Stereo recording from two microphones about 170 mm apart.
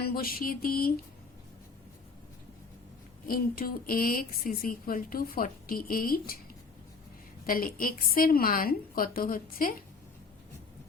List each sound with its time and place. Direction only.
0.0 s a woman's voice: 60° left (ahead or behind)
3.2 s a woman's voice: 60° left (ahead or behind)
7.4 s a woman's voice: 55° left (ahead or behind)